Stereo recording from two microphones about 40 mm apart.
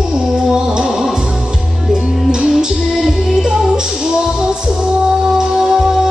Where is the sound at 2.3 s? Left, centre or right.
Centre.